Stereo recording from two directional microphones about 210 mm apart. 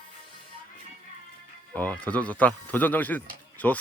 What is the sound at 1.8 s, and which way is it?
A man's voice, 5° left (ahead or behind).